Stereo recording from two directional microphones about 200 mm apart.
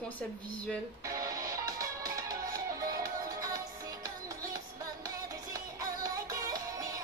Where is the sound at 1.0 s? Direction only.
15° right (ahead or behind).